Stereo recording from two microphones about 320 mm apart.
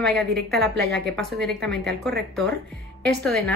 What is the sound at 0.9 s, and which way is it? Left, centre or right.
Speech, centre.